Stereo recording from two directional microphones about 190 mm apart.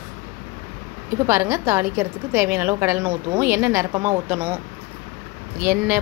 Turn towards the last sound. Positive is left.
turn(degrees=-10)  # may be behind; listen again after turning